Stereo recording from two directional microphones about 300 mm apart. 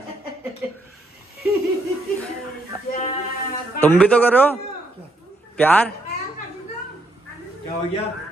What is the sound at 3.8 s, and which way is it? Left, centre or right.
Speech, centre.